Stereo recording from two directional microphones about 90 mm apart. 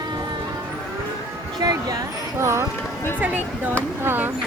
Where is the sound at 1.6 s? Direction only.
45° right (ahead or behind).